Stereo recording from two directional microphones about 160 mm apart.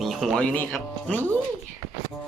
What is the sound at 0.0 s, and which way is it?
Speech, centre (ahead or behind).